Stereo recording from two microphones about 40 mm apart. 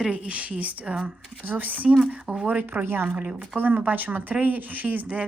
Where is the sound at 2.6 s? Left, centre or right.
Right.